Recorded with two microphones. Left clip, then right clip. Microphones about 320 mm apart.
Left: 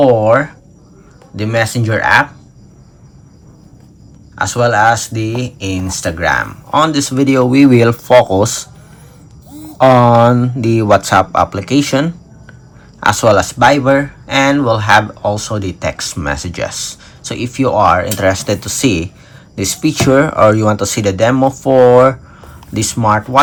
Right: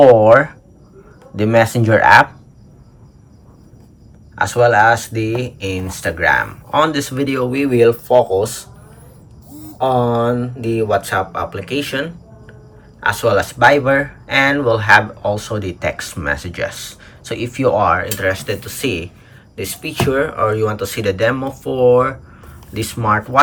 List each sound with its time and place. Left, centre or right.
0.0 s speech: centre
4.4 s speech: centre
10.6 s speech: centre